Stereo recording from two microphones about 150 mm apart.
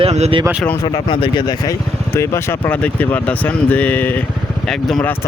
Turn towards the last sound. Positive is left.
turn(degrees=10)  # may be behind; listen again after turning